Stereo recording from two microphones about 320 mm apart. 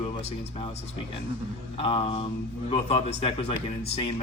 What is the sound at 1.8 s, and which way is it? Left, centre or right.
Speech, centre.